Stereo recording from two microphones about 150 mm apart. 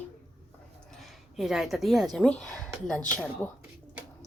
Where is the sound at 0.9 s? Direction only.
Centre (ahead or behind).